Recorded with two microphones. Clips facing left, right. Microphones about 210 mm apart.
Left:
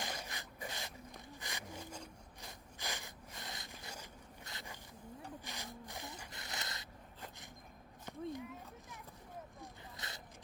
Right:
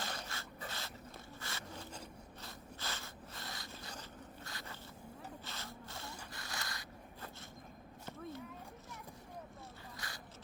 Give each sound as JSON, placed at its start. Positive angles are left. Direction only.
{"t": 0.0, "sound": "rub", "side_deg": 15}
{"t": 1.4, "sound": "wood", "side_deg": 15}
{"t": 2.4, "sound": "a sound", "side_deg": 15}
{"t": 4.4, "sound": "zipper", "side_deg": 15}
{"t": 5.5, "sound": "a sound", "side_deg": 15}
{"t": 10.0, "sound": "zipper", "side_deg": 20}